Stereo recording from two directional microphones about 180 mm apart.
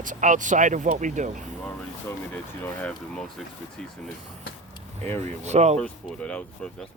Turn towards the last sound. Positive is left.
turn(degrees=5)  # may be behind; listen again after turning